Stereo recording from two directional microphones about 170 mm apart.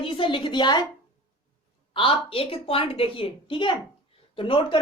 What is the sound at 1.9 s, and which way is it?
A woman's voice, 30° left (ahead or behind).